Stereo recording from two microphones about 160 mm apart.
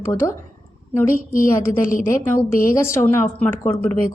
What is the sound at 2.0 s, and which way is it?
Speech, 15° left (ahead or behind).